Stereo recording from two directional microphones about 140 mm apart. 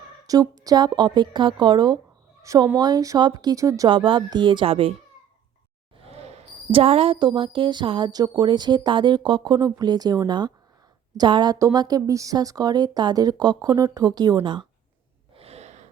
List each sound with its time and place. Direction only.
0.3 s speech: 25° right (ahead or behind)
3.8 s speech: 35° right (ahead or behind)
6.0 s speech: 45° right (ahead or behind)
15.4 s a sound: 50° right (ahead or behind)